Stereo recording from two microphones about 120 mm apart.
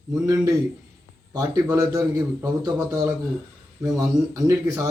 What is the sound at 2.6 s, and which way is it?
Speech, 30° right (ahead or behind).